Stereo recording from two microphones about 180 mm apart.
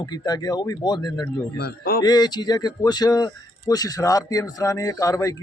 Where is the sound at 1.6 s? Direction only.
60° left (ahead or behind).